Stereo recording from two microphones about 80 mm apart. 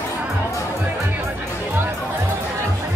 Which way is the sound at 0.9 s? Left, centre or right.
Right.